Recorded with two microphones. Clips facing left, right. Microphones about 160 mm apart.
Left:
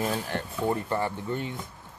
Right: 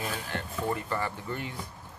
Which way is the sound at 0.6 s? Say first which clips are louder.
Left 4 dB; 25° left (ahead or behind).